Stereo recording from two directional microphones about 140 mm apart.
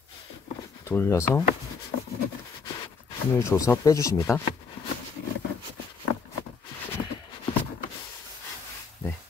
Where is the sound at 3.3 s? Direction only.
25° left (ahead or behind).